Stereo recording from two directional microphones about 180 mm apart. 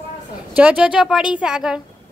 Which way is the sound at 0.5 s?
5° right (ahead or behind).